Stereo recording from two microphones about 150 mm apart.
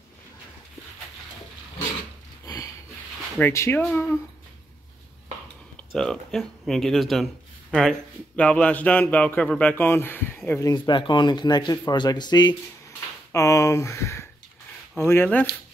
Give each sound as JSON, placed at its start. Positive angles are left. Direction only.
{"t": 2.4, "sound": "a sound", "side_deg": 20}
{"t": 3.3, "sound": "speech", "side_deg": 15}
{"t": 5.9, "sound": "speech", "side_deg": 5}
{"t": 10.7, "sound": "speech", "side_deg": 30}